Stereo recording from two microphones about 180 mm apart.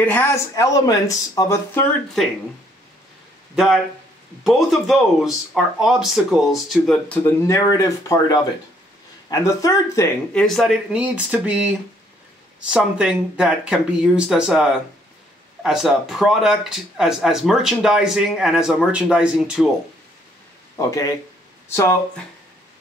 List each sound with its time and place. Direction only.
0.0 s speech: 10° left (ahead or behind)
3.5 s speech: centre (ahead or behind); by 10.4 s 15° left (ahead or behind)
10.4 s speech: centre (ahead or behind)
20.7 s speech: 20° left (ahead or behind)